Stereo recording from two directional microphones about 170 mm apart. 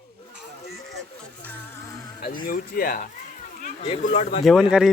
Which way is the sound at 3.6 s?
45° left (ahead or behind).